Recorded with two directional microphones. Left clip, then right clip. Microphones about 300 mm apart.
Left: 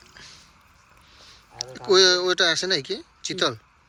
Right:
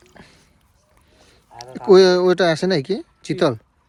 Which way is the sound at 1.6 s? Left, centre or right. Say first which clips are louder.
Right 6 dB; centre.